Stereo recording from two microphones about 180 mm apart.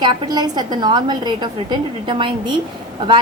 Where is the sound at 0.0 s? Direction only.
25° right (ahead or behind).